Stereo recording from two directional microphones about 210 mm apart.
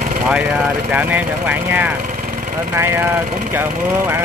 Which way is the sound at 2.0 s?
40° right (ahead or behind).